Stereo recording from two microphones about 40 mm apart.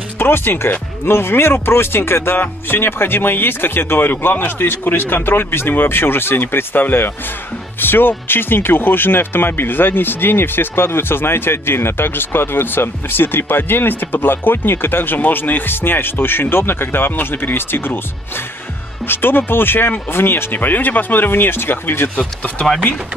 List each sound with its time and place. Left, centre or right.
0.2 s speech: left
2.4 s speech: left
19.0 s speech: left
22.1 s speech: left